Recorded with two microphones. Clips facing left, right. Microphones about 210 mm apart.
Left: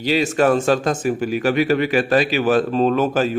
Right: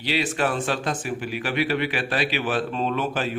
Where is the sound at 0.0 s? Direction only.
45° left (ahead or behind).